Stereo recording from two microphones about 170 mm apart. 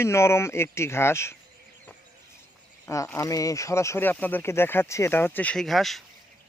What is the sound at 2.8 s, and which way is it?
Speech, 20° left (ahead or behind).